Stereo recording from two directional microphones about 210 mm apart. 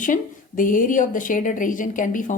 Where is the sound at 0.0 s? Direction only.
40° left (ahead or behind).